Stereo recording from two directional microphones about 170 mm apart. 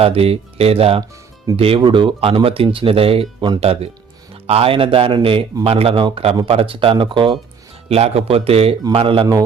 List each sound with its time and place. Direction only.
0.0 s speech: 35° right (ahead or behind)